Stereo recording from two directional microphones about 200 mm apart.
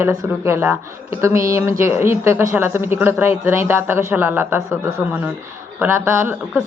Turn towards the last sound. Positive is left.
turn(degrees=-5)  # may be behind; listen again after turning